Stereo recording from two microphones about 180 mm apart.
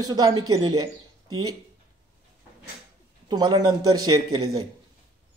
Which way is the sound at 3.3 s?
25° right (ahead or behind).